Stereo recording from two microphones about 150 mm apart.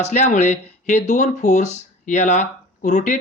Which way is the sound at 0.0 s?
50° left (ahead or behind).